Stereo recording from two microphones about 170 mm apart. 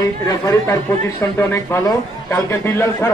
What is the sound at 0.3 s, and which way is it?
A man's voice, 20° left (ahead or behind).